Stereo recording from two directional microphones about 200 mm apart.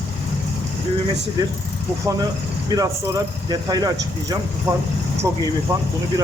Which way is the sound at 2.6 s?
20° right (ahead or behind).